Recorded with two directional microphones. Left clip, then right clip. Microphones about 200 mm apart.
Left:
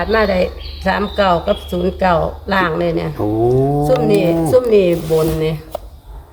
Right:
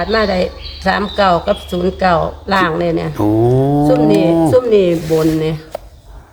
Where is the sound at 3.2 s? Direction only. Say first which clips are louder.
Right 2 dB; 50° right (ahead or behind).